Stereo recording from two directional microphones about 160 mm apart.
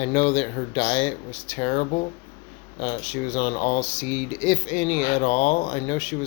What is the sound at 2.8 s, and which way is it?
Speech, 40° left (ahead or behind).